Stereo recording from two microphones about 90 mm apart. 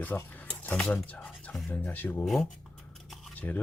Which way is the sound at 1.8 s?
20° left (ahead or behind).